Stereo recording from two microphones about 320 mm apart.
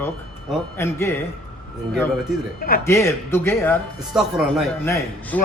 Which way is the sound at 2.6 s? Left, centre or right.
Left.